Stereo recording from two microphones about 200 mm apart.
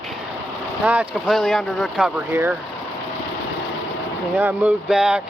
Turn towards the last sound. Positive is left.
turn(degrees=-5)  # may be behind; listen again after turning